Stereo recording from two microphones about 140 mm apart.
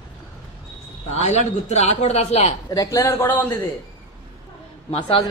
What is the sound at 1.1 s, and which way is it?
A man's voice, 55° left (ahead or behind).